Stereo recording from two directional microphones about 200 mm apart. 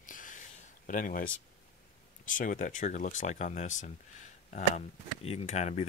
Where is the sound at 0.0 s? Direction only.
40° left (ahead or behind).